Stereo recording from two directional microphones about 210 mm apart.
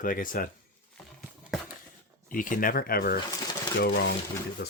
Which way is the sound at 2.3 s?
40° left (ahead or behind).